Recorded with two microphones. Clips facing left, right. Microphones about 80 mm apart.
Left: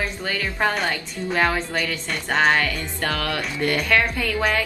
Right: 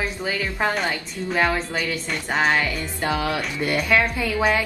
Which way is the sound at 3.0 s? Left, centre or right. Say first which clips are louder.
Right 2 dB; centre.